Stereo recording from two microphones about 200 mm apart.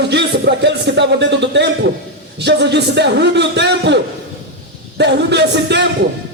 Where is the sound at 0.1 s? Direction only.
60° right (ahead or behind).